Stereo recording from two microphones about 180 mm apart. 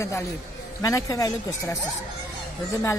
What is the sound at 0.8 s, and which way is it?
Speech, 20° left (ahead or behind).